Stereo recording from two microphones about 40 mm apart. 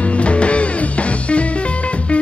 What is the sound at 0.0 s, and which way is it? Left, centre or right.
Music, left.